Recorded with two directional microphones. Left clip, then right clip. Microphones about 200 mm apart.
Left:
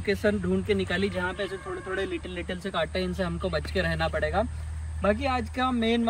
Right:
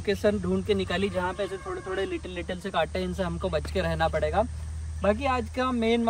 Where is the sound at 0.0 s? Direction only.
35° right (ahead or behind).